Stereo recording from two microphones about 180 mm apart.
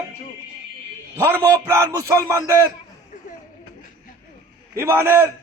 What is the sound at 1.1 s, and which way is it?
Speech, 15° right (ahead or behind).